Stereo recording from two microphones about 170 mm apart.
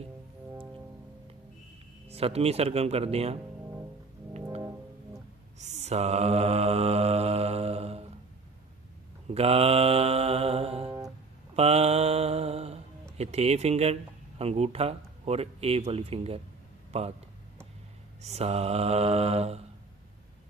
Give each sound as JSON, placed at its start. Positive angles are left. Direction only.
{"t": 2.0, "sound": "speech", "side_deg": -35}
{"t": 5.5, "sound": "mantra", "side_deg": -40}
{"t": 9.3, "sound": "mantra", "side_deg": -35}
{"t": 13.1, "sound": "speech", "side_deg": -40}
{"t": 18.2, "sound": "speech", "side_deg": -40}